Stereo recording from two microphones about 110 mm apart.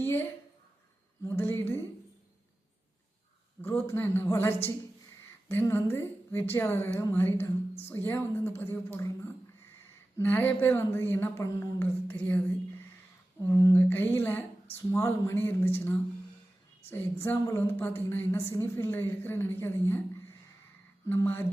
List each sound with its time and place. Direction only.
0.0 s a sound: 20° left (ahead or behind)
1.3 s a woman's voice: 20° left (ahead or behind)
3.6 s a woman's voice: 20° left (ahead or behind)
13.5 s a woman's voice: 30° left (ahead or behind)
13.7 s a woman's voice: 15° left (ahead or behind)